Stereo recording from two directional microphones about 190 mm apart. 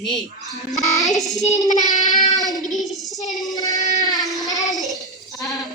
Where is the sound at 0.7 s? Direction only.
20° right (ahead or behind).